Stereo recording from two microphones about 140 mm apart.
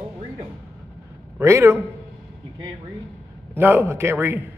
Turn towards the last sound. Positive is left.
turn(degrees=-15)  # may be behind; listen again after turning